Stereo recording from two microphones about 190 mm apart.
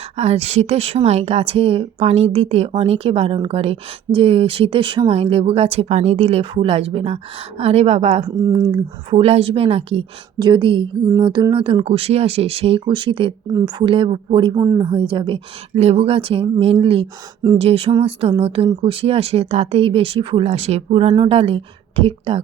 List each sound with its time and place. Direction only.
0.2 s a woman's voice: 35° right (ahead or behind)
8.2 s speech: 20° right (ahead or behind)